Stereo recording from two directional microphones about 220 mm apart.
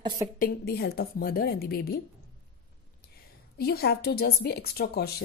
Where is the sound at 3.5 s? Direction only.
45° left (ahead or behind).